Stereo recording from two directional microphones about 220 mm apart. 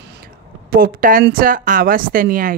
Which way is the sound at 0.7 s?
40° right (ahead or behind).